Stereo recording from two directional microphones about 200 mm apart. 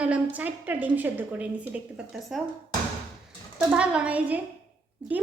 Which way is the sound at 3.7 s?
5° right (ahead or behind).